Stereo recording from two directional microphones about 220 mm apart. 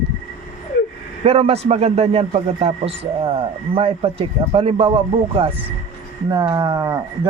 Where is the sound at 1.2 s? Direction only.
25° right (ahead or behind).